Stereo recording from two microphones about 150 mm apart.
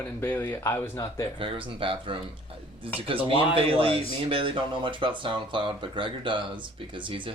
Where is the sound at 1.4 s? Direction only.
35° right (ahead or behind).